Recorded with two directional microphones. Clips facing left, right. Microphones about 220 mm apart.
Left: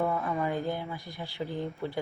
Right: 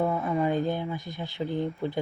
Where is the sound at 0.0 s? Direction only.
15° right (ahead or behind).